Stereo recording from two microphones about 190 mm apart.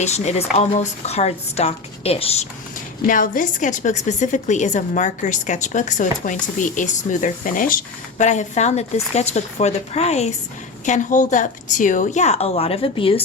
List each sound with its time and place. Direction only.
0.0 s a woman's voice: 35° left (ahead or behind)
3.1 s a woman's voice: 45° left (ahead or behind); by 13.2 s 30° left (ahead or behind)